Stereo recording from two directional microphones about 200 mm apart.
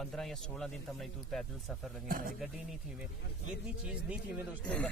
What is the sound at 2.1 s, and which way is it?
Speech, 45° right (ahead or behind).